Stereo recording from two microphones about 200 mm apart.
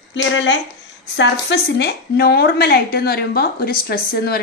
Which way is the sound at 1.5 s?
55° left (ahead or behind).